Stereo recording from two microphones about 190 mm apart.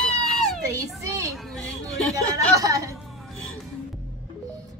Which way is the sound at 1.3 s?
Centre (ahead or behind).